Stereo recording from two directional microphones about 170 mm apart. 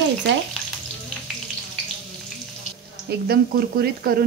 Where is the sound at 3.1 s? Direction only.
65° right (ahead or behind).